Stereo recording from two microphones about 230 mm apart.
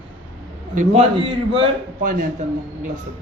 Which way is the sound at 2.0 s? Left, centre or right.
Right.